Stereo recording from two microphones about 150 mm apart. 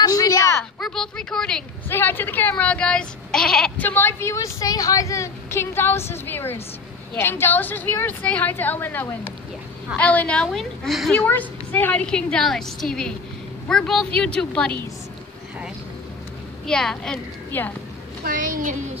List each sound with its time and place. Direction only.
0.0 s a sound: 25° left (ahead or behind)
0.7 s a woman's voice: 5° left (ahead or behind)
11.1 s a woman's voice: 10° left (ahead or behind)
16.6 s a woman's voice: 5° left (ahead or behind)
18.2 s a child's voice: 65° right (ahead or behind)